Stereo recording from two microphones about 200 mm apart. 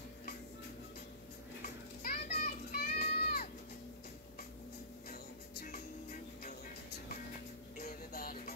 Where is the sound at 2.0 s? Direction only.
50° left (ahead or behind).